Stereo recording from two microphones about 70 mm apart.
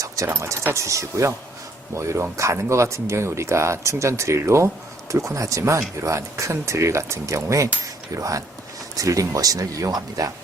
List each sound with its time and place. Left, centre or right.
0.3 s speech: right